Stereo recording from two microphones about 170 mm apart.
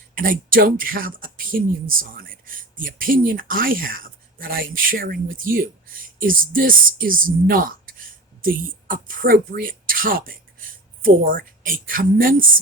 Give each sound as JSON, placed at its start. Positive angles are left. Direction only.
{"t": 0.2, "sound": "speech", "side_deg": -55}